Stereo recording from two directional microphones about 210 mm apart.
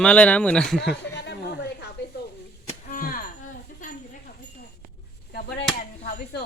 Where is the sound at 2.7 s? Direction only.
40° left (ahead or behind).